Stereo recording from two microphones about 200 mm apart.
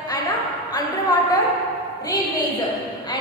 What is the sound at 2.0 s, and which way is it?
A woman's voice, 20° left (ahead or behind).